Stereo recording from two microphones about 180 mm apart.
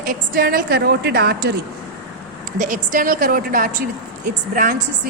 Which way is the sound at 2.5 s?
45° right (ahead or behind).